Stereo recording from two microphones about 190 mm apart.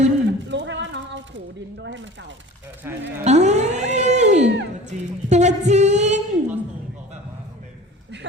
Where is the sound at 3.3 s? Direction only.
35° right (ahead or behind).